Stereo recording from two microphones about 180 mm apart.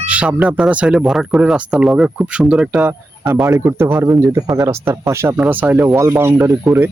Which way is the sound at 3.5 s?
15° right (ahead or behind).